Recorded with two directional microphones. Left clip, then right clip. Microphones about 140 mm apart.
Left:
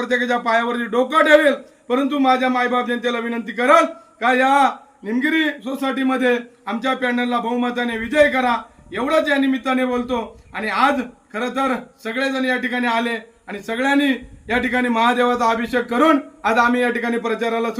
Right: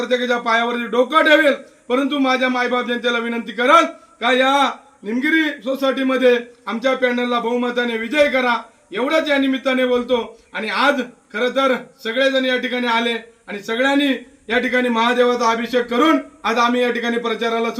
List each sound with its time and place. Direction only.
0.0 s a man's voice: 10° left (ahead or behind)